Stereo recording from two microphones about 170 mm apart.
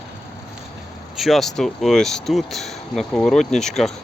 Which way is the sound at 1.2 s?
Centre (ahead or behind).